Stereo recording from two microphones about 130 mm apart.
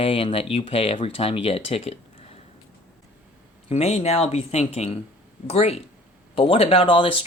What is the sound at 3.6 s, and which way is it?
Speech, 55° left (ahead or behind).